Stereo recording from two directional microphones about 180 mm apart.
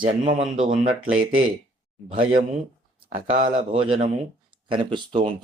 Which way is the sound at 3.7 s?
30° right (ahead or behind).